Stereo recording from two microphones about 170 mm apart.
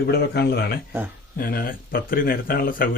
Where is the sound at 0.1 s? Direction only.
70° left (ahead or behind).